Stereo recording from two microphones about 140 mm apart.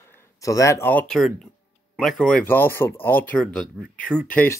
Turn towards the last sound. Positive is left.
turn(degrees=15)  # may be behind; listen again after turning